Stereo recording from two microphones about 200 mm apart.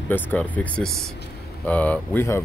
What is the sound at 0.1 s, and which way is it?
Speech, 5° left (ahead or behind).